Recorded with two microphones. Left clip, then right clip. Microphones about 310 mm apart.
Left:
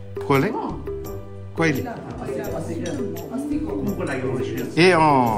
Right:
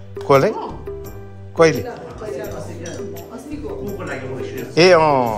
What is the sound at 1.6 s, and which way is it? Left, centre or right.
Speech, centre.